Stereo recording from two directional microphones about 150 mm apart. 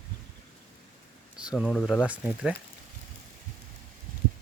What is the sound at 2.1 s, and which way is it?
Speech, 10° right (ahead or behind).